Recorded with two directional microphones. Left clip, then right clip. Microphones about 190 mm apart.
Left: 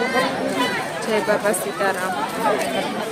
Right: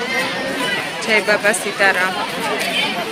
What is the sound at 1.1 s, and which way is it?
Speech, 5° left (ahead or behind).